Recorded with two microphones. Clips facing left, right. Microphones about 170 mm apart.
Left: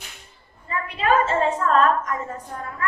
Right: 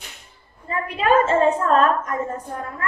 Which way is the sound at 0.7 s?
40° right (ahead or behind).